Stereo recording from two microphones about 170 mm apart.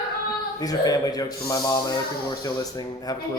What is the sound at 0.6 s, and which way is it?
Speech, 20° left (ahead or behind).